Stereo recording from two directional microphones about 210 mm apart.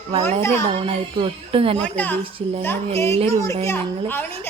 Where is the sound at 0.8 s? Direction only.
25° right (ahead or behind).